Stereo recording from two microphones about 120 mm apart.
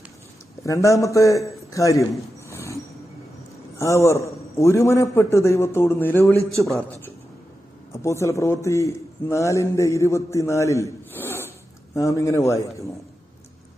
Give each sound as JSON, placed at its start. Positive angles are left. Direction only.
{"t": 0.6, "sound": "a man's voice", "side_deg": 25}
{"t": 2.5, "sound": "train", "side_deg": 20}
{"t": 3.8, "sound": "a man's voice", "side_deg": 25}
{"t": 8.0, "sound": "a man's voice", "side_deg": 25}